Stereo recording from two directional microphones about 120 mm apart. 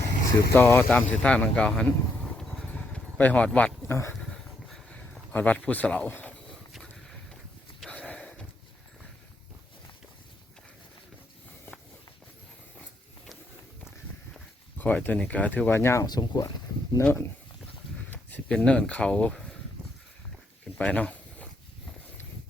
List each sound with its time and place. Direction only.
0.3 s speech: 30° left (ahead or behind)
0.6 s speech: 15° left (ahead or behind)
3.8 s speech: 20° left (ahead or behind)
4.1 s a sound: 5° left (ahead or behind)
6.7 s vehicle: centre (ahead or behind)
7.8 s a sound: 10° left (ahead or behind)
14.8 s speech: 10° left (ahead or behind)
16.0 s speech: 35° left (ahead or behind)
17.0 s speech: 15° left (ahead or behind)
20.7 s a sound: 10° left (ahead or behind)